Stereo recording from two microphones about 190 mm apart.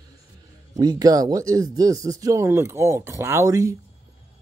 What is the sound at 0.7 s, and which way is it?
Speech, 20° right (ahead or behind).